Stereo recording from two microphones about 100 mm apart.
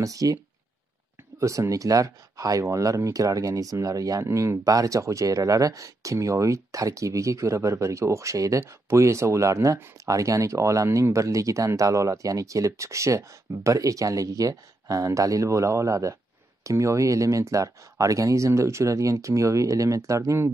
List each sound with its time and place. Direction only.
0.0 s speech: 35° right (ahead or behind)
1.4 s speech: 30° right (ahead or behind)